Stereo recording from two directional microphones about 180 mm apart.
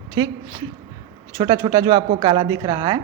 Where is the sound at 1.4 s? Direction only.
20° right (ahead or behind).